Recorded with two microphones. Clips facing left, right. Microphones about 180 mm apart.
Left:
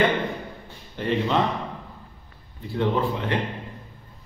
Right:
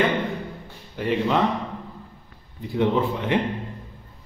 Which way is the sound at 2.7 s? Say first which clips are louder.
Right 2 dB; 15° right (ahead or behind).